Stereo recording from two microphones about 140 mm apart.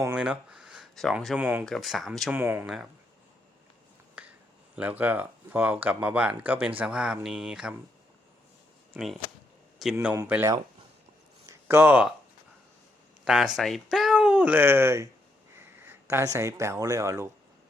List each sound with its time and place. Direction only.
0.0 s speech: 10° right (ahead or behind)
1.4 s speech: 15° right (ahead or behind)
1.6 s speech: centre (ahead or behind)
2.3 s speech: 15° right (ahead or behind)
2.6 s speech: 5° right (ahead or behind)
4.2 s finger snapping: 10° right (ahead or behind)
4.8 s speech: 10° right (ahead or behind)
9.9 s speech: 10° right (ahead or behind)
11.4 s a sound: 15° right (ahead or behind)
13.2 s speech: 5° right (ahead or behind); by 17.2 s 20° right (ahead or behind)